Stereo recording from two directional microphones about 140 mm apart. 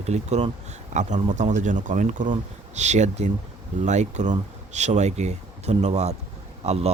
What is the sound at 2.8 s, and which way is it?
Speech, 55° right (ahead or behind).